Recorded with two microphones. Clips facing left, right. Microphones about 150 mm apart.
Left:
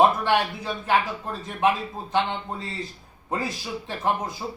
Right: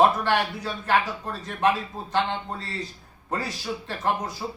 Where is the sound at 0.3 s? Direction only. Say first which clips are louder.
Left 1 dB; 15° left (ahead or behind).